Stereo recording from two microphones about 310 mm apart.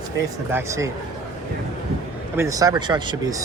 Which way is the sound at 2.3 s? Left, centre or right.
Centre.